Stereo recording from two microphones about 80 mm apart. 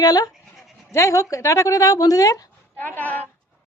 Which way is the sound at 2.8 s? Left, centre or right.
Left.